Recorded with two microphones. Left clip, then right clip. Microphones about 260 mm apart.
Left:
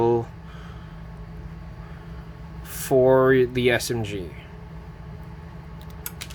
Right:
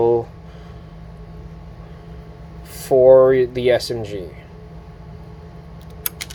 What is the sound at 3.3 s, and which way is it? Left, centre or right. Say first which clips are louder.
Speech: right 4 dB; left.